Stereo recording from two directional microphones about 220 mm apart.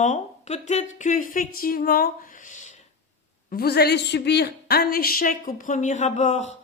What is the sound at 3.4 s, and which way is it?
Speech, 45° left (ahead or behind).